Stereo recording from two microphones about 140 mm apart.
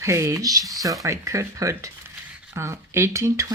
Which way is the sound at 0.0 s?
20° right (ahead or behind).